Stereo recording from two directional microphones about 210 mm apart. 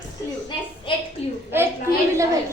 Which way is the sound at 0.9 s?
25° left (ahead or behind).